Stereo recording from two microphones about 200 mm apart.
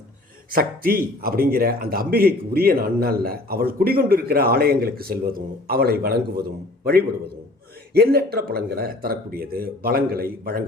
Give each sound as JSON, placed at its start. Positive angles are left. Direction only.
{"t": 0.5, "sound": "speech", "side_deg": -45}
{"t": 7.9, "sound": "speech", "side_deg": -50}